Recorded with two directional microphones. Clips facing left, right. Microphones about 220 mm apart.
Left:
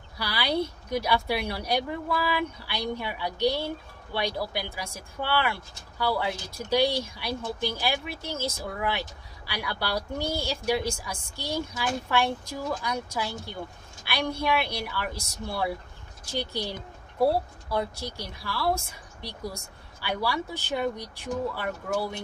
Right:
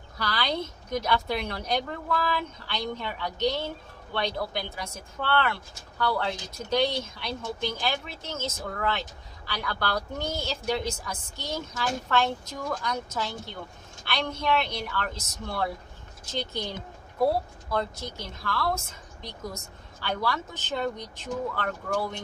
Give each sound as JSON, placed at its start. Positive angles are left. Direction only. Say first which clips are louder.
{"t": 0.2, "sound": "speech", "louder": "left 2 dB", "side_deg": 10}